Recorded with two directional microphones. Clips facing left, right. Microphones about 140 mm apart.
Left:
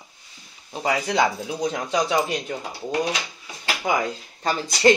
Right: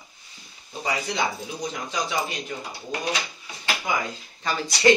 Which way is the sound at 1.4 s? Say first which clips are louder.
Left 6 dB; 75° left (ahead or behind).